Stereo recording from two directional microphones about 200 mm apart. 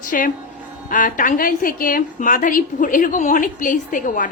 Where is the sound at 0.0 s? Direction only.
40° left (ahead or behind).